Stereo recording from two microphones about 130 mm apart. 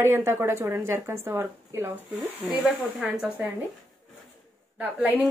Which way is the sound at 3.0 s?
10° right (ahead or behind).